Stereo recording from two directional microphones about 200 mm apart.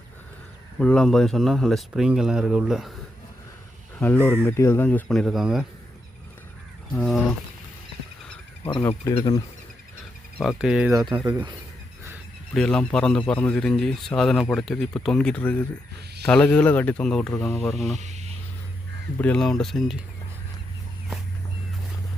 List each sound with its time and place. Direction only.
0.8 s speech: 5° left (ahead or behind)
4.3 s speech: 10° left (ahead or behind)
6.9 s speech: centre (ahead or behind)
8.9 s speech: 25° left (ahead or behind)
10.3 s speech: centre (ahead or behind)
10.9 s speech: 20° right (ahead or behind)
12.5 s speech: 5° left (ahead or behind)
17.9 s a sound: 35° right (ahead or behind)
19.2 s speech: 5° left (ahead or behind)